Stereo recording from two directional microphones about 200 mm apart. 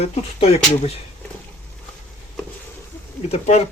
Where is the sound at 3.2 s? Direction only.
35° left (ahead or behind).